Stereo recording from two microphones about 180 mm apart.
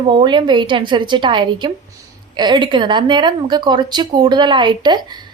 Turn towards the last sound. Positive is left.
turn(degrees=-25)  # may be behind; listen again after turning